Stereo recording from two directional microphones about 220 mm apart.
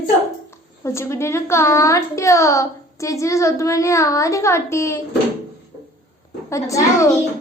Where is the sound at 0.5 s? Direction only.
10° left (ahead or behind).